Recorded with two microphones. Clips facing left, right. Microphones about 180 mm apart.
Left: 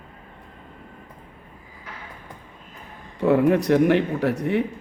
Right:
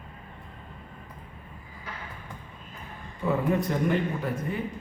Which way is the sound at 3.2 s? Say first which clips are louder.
Left 8 dB; 75° left (ahead or behind).